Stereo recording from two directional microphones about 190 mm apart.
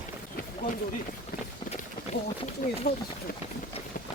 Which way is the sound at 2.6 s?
45° left (ahead or behind).